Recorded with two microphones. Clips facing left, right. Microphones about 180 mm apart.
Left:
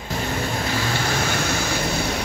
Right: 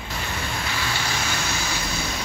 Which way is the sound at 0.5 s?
45° left (ahead or behind).